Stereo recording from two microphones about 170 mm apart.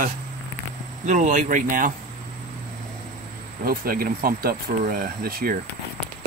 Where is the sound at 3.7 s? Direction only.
60° right (ahead or behind).